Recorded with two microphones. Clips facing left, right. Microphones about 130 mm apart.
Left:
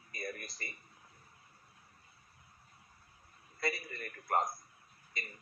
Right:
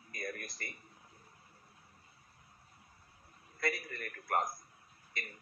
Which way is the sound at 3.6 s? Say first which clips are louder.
Right 1 dB; 5° left (ahead or behind).